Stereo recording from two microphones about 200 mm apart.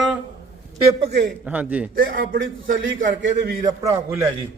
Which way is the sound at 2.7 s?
70° right (ahead or behind).